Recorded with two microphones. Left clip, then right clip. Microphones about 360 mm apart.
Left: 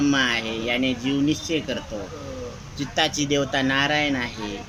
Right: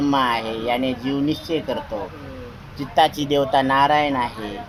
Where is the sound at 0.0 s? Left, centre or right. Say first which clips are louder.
Right 2 dB; centre.